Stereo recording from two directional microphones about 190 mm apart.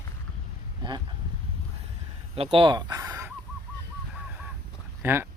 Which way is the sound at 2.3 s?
30° right (ahead or behind).